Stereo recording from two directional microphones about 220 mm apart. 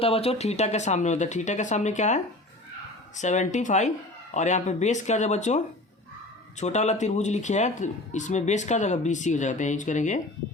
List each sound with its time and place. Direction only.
0.0 s speech: 25° left (ahead or behind)